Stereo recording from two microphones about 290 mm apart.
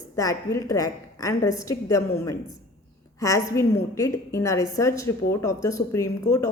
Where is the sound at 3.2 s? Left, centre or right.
Centre.